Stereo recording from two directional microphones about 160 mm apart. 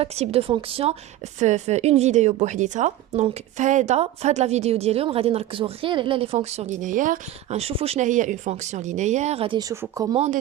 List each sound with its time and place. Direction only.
0.0 s a woman's voice: 40° right (ahead or behind)
1.4 s a woman's voice: 45° right (ahead or behind)
9.9 s speech: 20° right (ahead or behind)
10.2 s a woman's voice: 45° right (ahead or behind)